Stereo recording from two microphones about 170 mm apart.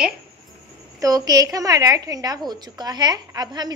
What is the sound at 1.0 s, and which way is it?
A woman's voice, 20° right (ahead or behind).